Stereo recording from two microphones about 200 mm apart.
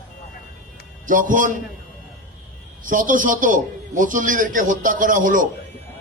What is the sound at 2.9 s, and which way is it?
A man's voice, 40° right (ahead or behind).